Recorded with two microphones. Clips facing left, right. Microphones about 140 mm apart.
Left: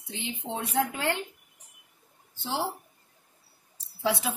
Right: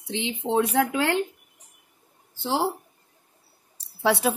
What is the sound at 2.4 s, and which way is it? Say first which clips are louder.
Speech: right 6 dB; 75° right (ahead or behind).